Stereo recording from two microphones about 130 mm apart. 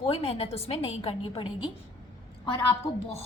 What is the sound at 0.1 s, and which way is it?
A woman's voice, 50° left (ahead or behind).